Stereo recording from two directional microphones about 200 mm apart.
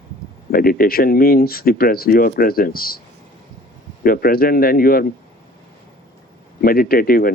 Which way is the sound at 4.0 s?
45° left (ahead or behind).